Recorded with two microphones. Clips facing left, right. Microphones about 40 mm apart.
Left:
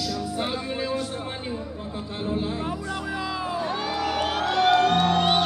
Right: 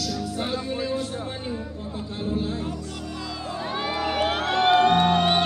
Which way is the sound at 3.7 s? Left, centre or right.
Right.